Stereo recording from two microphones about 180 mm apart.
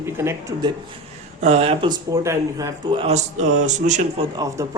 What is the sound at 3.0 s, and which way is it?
Speech, 40° right (ahead or behind).